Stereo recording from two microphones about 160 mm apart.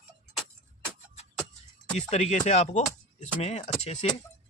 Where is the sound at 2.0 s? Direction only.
45° left (ahead or behind).